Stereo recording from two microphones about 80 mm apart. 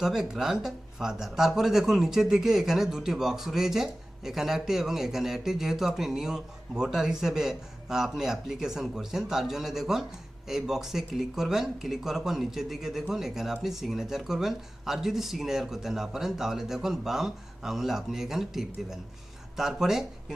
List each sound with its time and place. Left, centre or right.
0.0 s speech: centre